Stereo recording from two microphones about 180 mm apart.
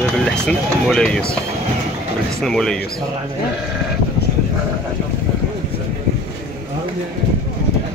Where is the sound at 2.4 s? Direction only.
5° left (ahead or behind).